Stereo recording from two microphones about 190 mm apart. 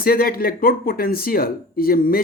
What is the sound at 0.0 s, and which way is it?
Speech, 50° left (ahead or behind).